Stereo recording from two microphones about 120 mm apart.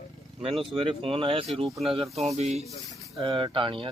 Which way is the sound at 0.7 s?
50° right (ahead or behind).